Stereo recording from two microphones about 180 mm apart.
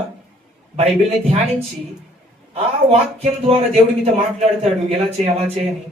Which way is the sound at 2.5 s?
35° right (ahead or behind).